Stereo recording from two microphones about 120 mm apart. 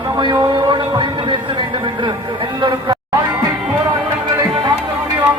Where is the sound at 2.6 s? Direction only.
40° right (ahead or behind).